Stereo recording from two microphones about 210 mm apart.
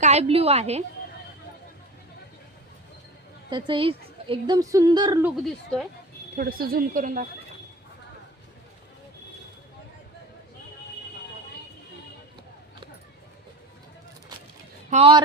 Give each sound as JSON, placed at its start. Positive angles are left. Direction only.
{"t": 0.0, "sound": "a woman's voice", "side_deg": -30}
{"t": 3.7, "sound": "a woman's voice", "side_deg": -25}
{"t": 5.2, "sound": "a woman's voice", "side_deg": 0}
{"t": 6.3, "sound": "a woman's voice", "side_deg": -45}
{"t": 14.8, "sound": "a man's voice", "side_deg": -30}